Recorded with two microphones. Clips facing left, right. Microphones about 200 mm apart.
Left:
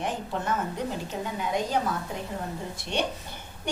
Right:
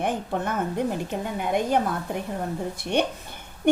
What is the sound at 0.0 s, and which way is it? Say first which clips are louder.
A woman's voice: right 4 dB; 55° right (ahead or behind).